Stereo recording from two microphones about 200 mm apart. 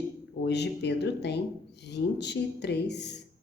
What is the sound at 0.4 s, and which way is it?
Speech, 60° left (ahead or behind).